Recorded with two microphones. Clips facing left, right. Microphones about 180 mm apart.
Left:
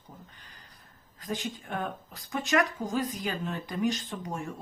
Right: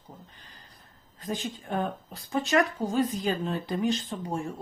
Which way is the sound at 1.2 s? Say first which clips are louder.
Right 1 dB; 30° right (ahead or behind).